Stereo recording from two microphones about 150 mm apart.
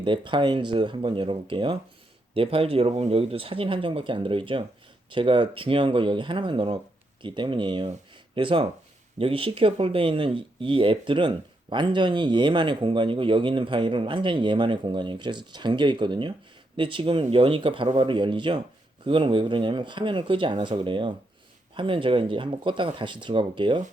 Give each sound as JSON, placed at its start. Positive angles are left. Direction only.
{"t": 0.0, "sound": "speech", "side_deg": -35}